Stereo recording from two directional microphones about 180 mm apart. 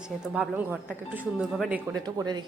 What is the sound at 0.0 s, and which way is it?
Speech, 10° right (ahead or behind).